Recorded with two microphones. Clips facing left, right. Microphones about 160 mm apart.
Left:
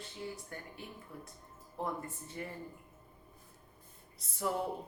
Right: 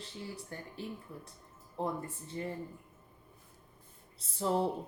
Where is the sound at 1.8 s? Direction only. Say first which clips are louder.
Right 3 dB; 30° right (ahead or behind).